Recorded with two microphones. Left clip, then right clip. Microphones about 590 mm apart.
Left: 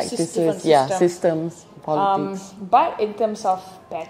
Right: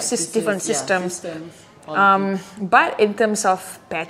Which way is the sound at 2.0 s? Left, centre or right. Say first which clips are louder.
Right 5 dB; right.